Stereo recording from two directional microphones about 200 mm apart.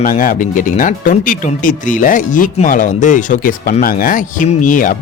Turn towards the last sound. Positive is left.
turn(degrees=40)  # may be behind; listen again after turning